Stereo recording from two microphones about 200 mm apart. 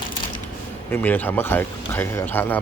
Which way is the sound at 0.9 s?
10° left (ahead or behind).